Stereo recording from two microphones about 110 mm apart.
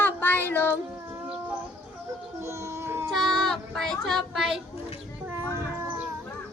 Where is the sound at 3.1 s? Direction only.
Centre (ahead or behind).